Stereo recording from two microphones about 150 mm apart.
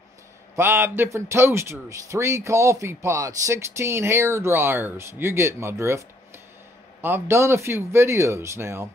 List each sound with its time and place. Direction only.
0.6 s a man's voice: 15° right (ahead or behind)